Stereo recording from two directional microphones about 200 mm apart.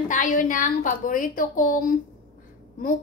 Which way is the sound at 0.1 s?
40° left (ahead or behind).